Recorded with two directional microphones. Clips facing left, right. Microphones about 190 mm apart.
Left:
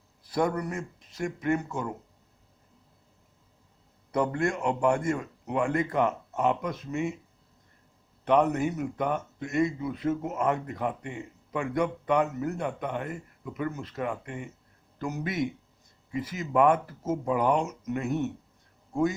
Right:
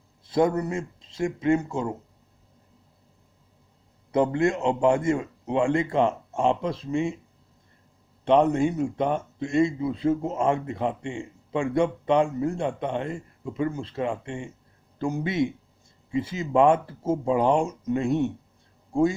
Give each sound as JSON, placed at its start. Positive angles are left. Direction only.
{"t": 0.3, "sound": "speech", "side_deg": -25}
{"t": 4.1, "sound": "speech", "side_deg": -25}
{"t": 8.2, "sound": "speech", "side_deg": -25}